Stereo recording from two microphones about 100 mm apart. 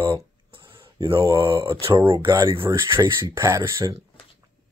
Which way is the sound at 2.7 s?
35° right (ahead or behind).